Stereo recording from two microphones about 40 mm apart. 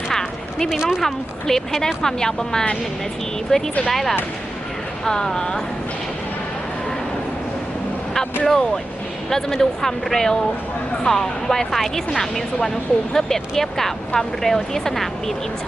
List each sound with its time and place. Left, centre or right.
0.1 s a sound: centre
1.0 s speech: centre
3.8 s speech: centre
5.0 s speech: centre
8.4 s speech: centre